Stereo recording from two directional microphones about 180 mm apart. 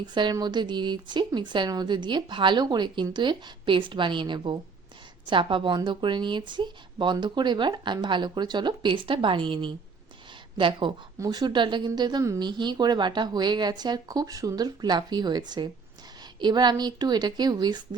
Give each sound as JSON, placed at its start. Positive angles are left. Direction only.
{"t": 0.0, "sound": "a woman's voice", "side_deg": -25}